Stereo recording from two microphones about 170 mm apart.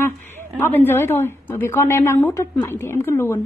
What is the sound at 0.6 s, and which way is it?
A woman's voice, 15° left (ahead or behind).